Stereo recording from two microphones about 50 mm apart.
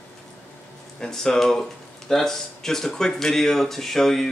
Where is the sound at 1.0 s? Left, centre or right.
Centre.